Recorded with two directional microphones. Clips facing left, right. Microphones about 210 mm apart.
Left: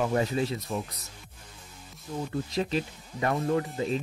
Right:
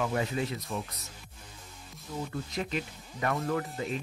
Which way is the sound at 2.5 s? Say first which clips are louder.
Left 5 dB; 30° left (ahead or behind).